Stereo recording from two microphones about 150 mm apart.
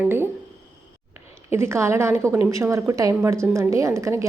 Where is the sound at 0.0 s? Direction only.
15° right (ahead or behind).